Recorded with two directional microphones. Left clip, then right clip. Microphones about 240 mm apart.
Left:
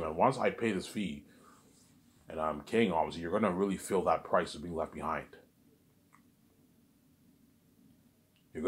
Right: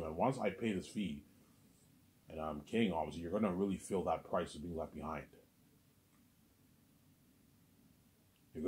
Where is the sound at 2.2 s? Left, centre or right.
Centre.